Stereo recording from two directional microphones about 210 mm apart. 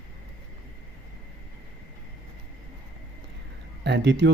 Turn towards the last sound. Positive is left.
turn(degrees=-55)  # may be behind; listen again after turning